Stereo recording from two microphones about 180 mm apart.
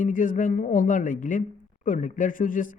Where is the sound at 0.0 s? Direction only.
45° left (ahead or behind).